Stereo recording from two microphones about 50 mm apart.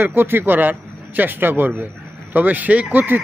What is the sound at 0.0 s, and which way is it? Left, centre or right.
A man's voice, right.